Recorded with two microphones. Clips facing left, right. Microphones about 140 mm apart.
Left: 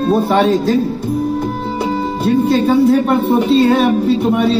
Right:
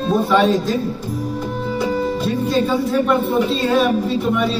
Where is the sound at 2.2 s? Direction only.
65° left (ahead or behind).